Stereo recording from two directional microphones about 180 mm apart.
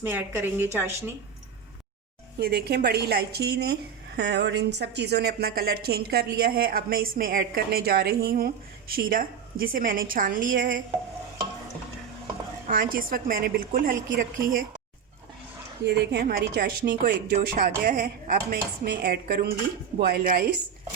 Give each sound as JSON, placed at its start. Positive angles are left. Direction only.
{"t": 0.0, "sound": "speech", "side_deg": -10}
{"t": 2.4, "sound": "speech", "side_deg": -60}
{"t": 4.2, "sound": "a woman's voice", "side_deg": -70}
{"t": 12.6, "sound": "a woman's voice", "side_deg": -50}
{"t": 15.9, "sound": "speech", "side_deg": -65}